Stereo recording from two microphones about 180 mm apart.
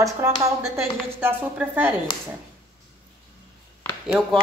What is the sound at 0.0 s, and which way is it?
A woman's voice, 15° right (ahead or behind).